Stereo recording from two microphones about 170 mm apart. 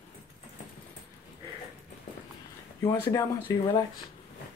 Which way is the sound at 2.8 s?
20° left (ahead or behind).